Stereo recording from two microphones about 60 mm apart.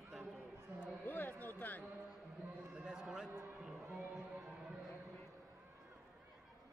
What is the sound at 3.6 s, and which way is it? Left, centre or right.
Music, centre.